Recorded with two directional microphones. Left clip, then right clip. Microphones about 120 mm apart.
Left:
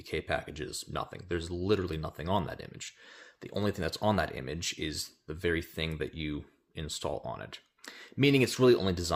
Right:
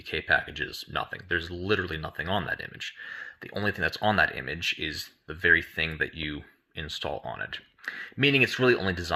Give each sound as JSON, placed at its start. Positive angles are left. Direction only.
{"t": 0.0, "sound": "speech", "side_deg": 40}